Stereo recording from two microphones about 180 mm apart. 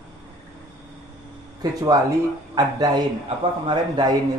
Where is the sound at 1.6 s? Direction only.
20° right (ahead or behind).